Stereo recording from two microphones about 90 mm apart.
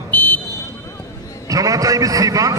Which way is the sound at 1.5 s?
40° right (ahead or behind).